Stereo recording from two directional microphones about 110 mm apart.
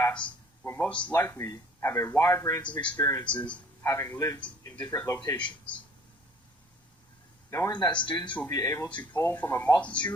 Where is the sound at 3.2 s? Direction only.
10° left (ahead or behind).